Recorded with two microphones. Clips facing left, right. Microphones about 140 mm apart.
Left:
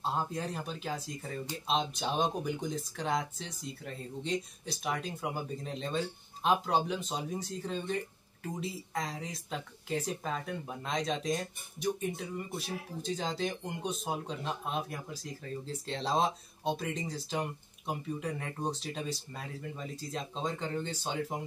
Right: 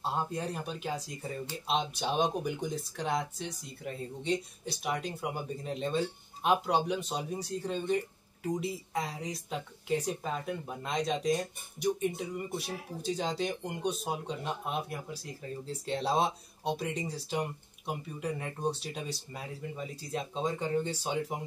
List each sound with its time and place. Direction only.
0.0 s speech: 5° right (ahead or behind)